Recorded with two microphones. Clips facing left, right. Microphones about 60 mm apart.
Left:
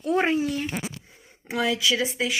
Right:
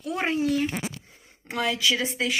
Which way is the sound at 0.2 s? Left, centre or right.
Centre.